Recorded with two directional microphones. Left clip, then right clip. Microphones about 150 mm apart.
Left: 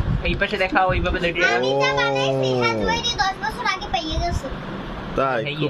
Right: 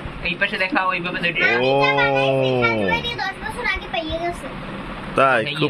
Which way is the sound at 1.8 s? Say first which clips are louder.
Right 3 dB; 15° right (ahead or behind).